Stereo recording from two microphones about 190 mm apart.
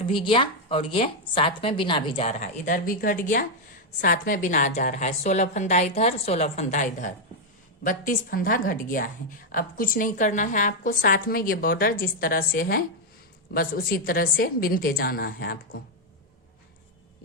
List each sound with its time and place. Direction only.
0.0 s a woman's voice: 25° left (ahead or behind)
2.2 s a woman's voice: 40° left (ahead or behind)